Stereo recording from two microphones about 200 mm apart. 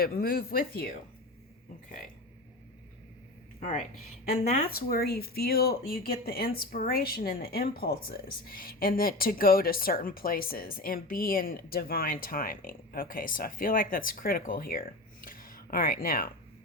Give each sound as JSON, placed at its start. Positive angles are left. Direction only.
{"t": 0.0, "sound": "speech", "side_deg": 50}
{"t": 3.6, "sound": "speech", "side_deg": 40}